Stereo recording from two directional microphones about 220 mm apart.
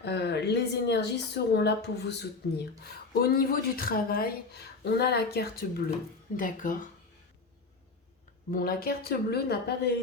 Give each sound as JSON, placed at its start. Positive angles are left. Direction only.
{"t": 0.0, "sound": "speech", "side_deg": 50}
{"t": 8.4, "sound": "speech", "side_deg": 40}